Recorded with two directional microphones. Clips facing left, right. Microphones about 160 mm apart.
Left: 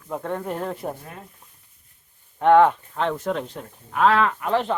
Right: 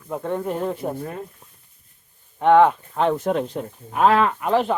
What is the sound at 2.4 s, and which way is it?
Speech, centre (ahead or behind).